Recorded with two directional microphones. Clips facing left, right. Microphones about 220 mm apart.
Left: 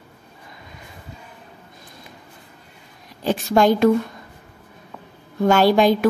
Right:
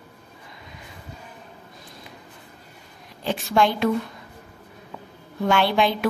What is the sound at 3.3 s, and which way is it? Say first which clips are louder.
Speech: left 5 dB; 40° left (ahead or behind).